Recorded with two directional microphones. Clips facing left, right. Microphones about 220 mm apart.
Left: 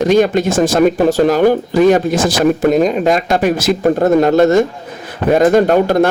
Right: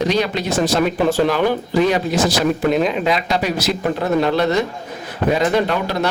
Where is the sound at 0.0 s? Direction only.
50° left (ahead or behind).